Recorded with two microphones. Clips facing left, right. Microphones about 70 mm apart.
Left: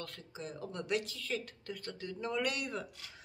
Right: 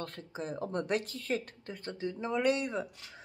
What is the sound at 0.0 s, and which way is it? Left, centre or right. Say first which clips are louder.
Speech: right 5 dB; right.